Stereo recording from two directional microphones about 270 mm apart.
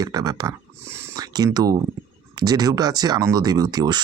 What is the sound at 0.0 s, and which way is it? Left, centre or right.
Speech, centre.